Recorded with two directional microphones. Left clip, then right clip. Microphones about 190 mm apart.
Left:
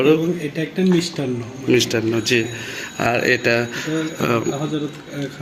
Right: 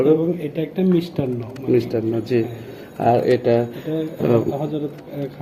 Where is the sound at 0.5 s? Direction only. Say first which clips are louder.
Left 1 dB; 30° left (ahead or behind).